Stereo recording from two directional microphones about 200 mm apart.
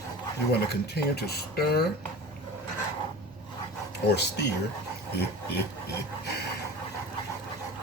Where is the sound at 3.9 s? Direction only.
55° left (ahead or behind).